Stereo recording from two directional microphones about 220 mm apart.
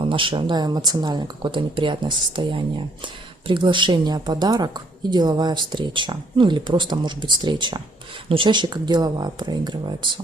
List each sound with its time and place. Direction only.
0.0 s speech: 25° right (ahead or behind)